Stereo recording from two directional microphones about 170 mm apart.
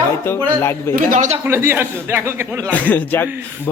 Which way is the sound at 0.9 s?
50° right (ahead or behind).